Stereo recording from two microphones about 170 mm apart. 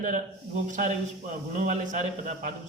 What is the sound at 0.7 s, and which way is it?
Speech, 50° right (ahead or behind).